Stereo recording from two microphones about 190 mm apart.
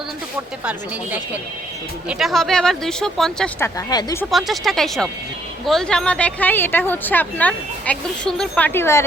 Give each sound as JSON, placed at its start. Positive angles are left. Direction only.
{"t": 0.6, "sound": "a woman's voice", "side_deg": -5}
{"t": 3.8, "sound": "speech", "side_deg": 20}
{"t": 4.3, "sound": "speech", "side_deg": 0}